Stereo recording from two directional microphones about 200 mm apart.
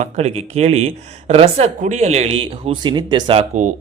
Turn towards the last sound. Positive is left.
turn(degrees=-35)  # may be behind; listen again after turning